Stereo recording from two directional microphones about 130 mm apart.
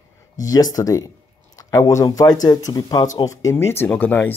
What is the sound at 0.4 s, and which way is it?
Speech, 30° left (ahead or behind).